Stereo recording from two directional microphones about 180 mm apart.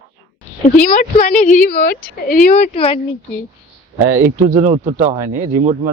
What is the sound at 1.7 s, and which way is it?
Speech, 55° left (ahead or behind).